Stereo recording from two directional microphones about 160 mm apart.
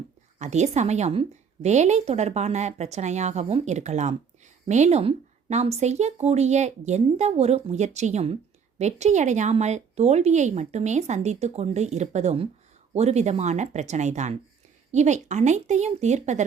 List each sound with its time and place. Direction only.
0.3 s speech: 45° right (ahead or behind)